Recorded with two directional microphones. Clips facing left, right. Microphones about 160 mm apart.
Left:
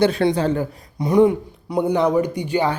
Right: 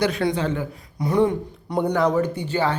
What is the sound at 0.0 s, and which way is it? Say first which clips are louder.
Speech: left 4 dB; 30° left (ahead or behind).